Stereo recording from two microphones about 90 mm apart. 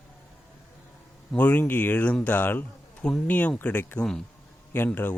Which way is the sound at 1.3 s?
20° left (ahead or behind).